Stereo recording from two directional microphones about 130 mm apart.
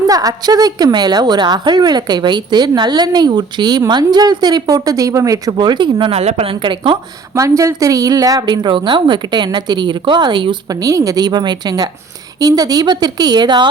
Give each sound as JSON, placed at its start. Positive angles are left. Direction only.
{"t": 0.1, "sound": "a woman's voice", "side_deg": -30}
{"t": 6.1, "sound": "speech", "side_deg": -55}
{"t": 7.3, "sound": "a woman's voice", "side_deg": -25}